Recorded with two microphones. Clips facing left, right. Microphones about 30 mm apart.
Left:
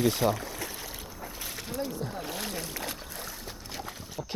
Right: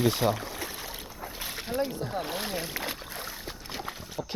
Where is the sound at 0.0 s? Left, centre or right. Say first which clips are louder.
Even; centre.